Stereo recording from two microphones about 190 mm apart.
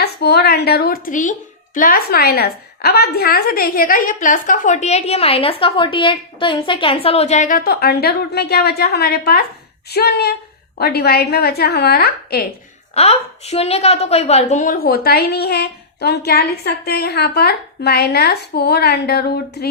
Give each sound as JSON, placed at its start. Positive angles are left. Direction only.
{"t": 0.0, "sound": "a woman's voice", "side_deg": 55}
{"t": 12.9, "sound": "a woman's voice", "side_deg": 35}